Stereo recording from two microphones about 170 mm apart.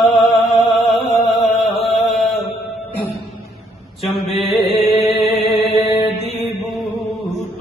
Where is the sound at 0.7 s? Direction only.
Centre (ahead or behind).